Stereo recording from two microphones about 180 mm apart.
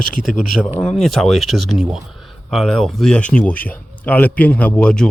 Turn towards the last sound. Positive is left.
turn(degrees=5)  # may be behind; listen again after turning